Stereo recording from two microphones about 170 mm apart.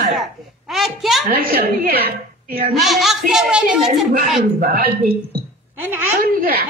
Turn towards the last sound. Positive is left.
turn(degrees=-60)  # may be behind; listen again after turning